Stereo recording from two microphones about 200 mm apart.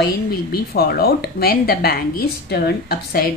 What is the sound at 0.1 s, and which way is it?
A woman's voice, 50° left (ahead or behind).